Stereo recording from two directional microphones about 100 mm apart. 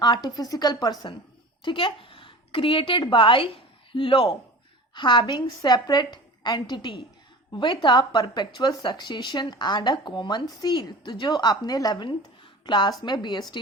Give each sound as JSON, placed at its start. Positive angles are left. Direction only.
{"t": 0.0, "sound": "a woman's voice", "side_deg": 45}
{"t": 1.6, "sound": "a woman's voice", "side_deg": 55}
{"t": 4.9, "sound": "a woman's voice", "side_deg": 50}